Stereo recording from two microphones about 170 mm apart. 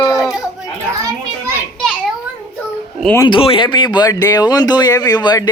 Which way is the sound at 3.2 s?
30° left (ahead or behind).